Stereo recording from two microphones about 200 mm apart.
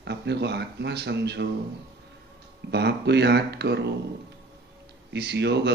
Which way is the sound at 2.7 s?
55° right (ahead or behind).